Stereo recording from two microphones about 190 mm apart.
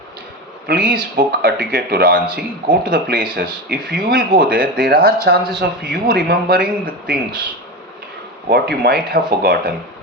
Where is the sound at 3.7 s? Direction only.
50° right (ahead or behind).